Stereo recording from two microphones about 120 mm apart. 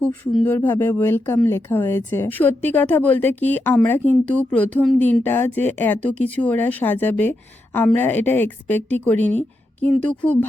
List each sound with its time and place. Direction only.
0.4 s speech: 15° left (ahead or behind)